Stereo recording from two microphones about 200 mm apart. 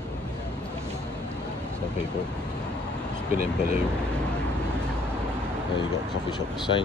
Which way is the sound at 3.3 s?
45° right (ahead or behind).